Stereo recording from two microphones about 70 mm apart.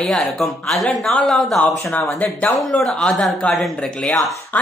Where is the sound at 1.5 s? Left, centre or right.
Left.